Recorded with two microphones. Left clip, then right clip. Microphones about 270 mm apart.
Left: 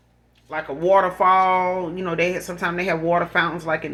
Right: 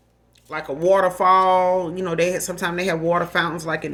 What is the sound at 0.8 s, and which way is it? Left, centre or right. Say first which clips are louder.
Speech: even; right.